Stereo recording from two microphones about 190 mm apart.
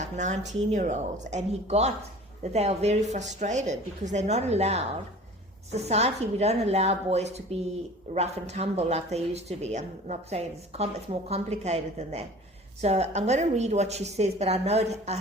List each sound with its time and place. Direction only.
0.0 s speech: 40° right (ahead or behind)
5.9 s speech: 35° right (ahead or behind)